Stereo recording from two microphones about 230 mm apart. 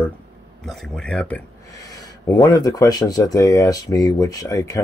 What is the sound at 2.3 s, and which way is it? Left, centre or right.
Speech, centre.